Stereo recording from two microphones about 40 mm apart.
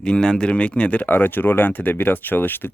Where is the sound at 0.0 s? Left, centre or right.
Left.